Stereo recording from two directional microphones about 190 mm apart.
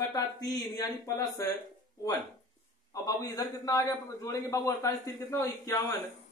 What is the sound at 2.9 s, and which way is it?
A man's voice, 20° left (ahead or behind).